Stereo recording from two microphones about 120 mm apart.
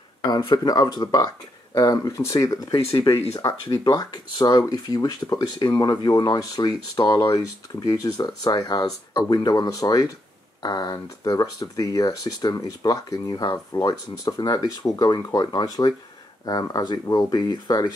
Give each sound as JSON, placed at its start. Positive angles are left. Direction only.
{"t": 0.3, "sound": "speech", "side_deg": 35}
{"t": 2.8, "sound": "speech", "side_deg": 45}
{"t": 3.1, "sound": "speech", "side_deg": 30}